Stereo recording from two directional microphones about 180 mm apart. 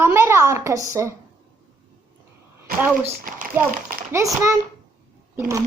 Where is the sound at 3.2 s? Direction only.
50° right (ahead or behind).